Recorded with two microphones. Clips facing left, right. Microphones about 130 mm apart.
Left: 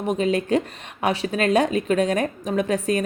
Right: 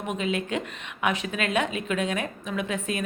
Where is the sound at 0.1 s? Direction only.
40° left (ahead or behind).